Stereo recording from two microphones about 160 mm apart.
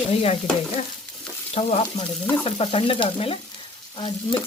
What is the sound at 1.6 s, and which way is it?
Frying, 40° left (ahead or behind).